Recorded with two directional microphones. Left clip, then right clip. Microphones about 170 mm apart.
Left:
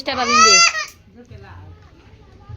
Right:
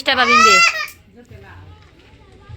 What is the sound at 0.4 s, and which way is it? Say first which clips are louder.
Speech: left 1 dB; 50° right (ahead or behind).